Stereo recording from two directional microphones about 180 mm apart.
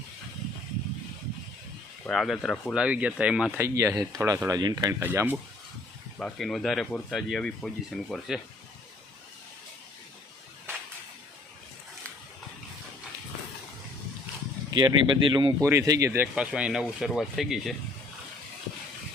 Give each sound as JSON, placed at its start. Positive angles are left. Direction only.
{"t": 2.0, "sound": "speech", "side_deg": 0}
{"t": 3.8, "sound": "speech", "side_deg": -15}
{"t": 6.1, "sound": "speech", "side_deg": 0}
{"t": 14.7, "sound": "speech", "side_deg": -25}